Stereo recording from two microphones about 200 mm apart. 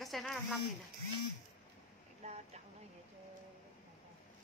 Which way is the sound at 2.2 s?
30° right (ahead or behind).